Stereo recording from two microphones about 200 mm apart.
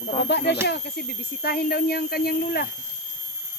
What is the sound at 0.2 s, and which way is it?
Speech, 55° left (ahead or behind).